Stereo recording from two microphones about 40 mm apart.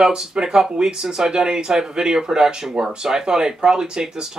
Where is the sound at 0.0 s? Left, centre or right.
Centre.